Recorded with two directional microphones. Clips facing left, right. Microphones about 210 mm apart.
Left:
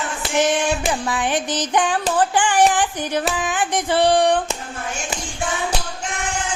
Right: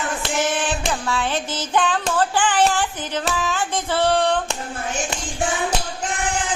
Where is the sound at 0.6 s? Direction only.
15° left (ahead or behind).